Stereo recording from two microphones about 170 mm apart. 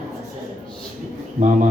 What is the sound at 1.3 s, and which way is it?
Speech, 45° right (ahead or behind).